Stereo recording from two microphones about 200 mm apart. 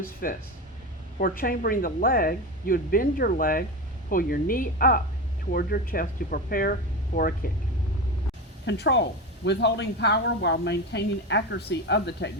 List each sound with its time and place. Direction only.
0.0 s speech: 45° left (ahead or behind)
8.6 s a woman's voice: 55° left (ahead or behind)